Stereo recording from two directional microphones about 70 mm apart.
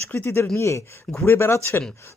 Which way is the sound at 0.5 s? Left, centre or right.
Left.